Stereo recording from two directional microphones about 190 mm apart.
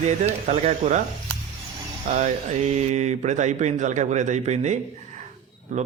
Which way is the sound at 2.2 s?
35° right (ahead or behind).